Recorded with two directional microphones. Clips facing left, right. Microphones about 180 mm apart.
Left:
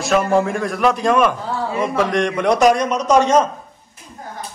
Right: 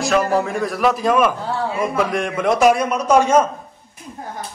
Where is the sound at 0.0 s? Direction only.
Centre (ahead or behind).